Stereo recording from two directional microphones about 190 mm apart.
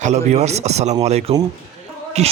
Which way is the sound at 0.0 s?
35° right (ahead or behind).